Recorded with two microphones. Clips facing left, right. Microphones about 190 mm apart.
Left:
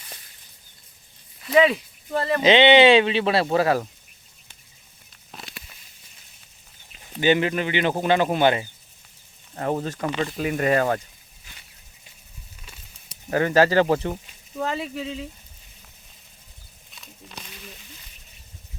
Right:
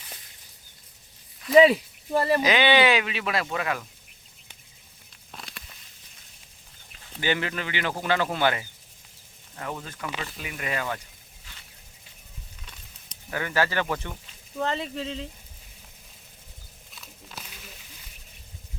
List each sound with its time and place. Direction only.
1.4 s speech: 5° left (ahead or behind)
2.4 s speech: 25° left (ahead or behind)
5.3 s a sound: centre (ahead or behind)
7.0 s speech: 20° left (ahead or behind)
9.6 s speech: 35° left (ahead or behind)
10.2 s speech: 45° left (ahead or behind)
12.6 s a sound: 5° left (ahead or behind)
13.3 s speech: 35° left (ahead or behind)
14.6 s speech: 10° left (ahead or behind)
16.9 s wild animals: 5° right (ahead or behind)